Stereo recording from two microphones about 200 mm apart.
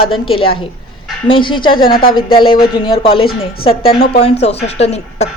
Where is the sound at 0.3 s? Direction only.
25° left (ahead or behind).